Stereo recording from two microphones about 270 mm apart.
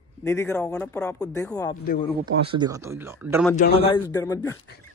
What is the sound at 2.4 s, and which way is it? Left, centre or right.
A man's voice, centre.